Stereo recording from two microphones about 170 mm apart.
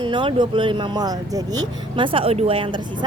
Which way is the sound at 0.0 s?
30° right (ahead or behind).